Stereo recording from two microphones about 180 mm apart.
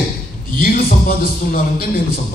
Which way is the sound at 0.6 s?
55° left (ahead or behind).